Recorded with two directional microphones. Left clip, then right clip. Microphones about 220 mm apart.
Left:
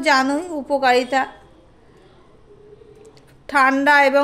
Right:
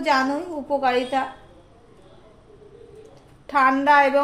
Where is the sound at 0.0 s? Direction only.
40° left (ahead or behind).